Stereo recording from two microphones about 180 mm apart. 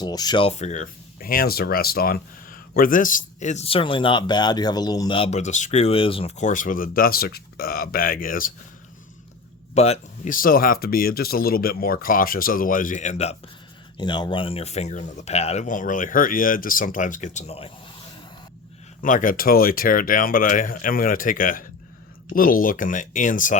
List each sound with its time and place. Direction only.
0.0 s speech: 20° left (ahead or behind); by 8.5 s 50° left (ahead or behind)
9.7 s speech: 35° left (ahead or behind)
14.0 s speech: 25° left (ahead or behind)
19.0 s speech: 45° left (ahead or behind)